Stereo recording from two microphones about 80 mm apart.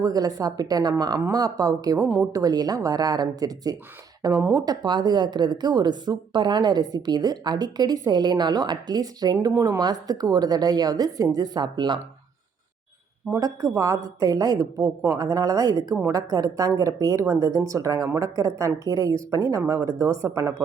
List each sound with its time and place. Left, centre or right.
0.0 s a woman's voice: right
13.7 s speech: right
19.9 s speech: right